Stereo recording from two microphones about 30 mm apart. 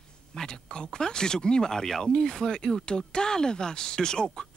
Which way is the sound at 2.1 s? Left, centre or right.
Left.